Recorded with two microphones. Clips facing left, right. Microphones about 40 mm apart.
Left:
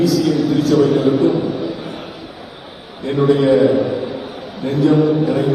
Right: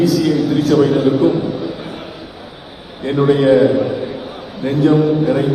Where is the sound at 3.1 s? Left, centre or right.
Right.